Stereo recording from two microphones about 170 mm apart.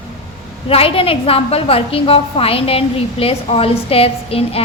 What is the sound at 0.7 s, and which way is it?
A woman's voice, 35° left (ahead or behind).